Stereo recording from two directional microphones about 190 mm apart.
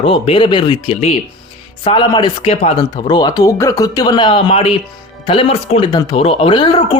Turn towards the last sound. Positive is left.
turn(degrees=30)  # may be behind; listen again after turning